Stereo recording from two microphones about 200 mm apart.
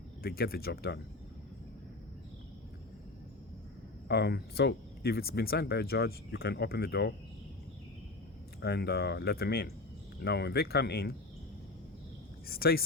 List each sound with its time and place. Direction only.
0.2 s speech: 50° left (ahead or behind)
4.1 s speech: 55° left (ahead or behind)
8.6 s speech: 55° left (ahead or behind)
12.5 s speech: 50° left (ahead or behind)